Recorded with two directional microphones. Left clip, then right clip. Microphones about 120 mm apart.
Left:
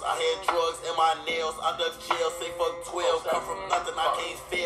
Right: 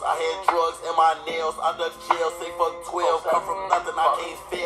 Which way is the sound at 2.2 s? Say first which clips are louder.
Right 4 dB; 40° right (ahead or behind).